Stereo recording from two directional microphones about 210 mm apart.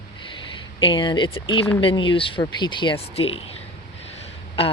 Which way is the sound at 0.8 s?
20° left (ahead or behind).